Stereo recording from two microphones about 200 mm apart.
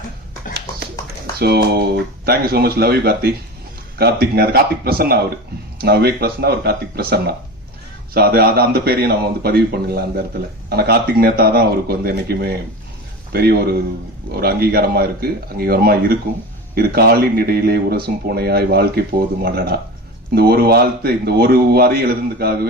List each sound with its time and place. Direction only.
1.4 s speech: 55° right (ahead or behind)